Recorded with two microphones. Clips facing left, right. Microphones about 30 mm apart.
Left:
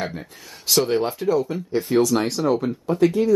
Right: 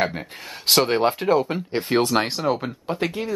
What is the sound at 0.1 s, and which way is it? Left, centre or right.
Speech, right.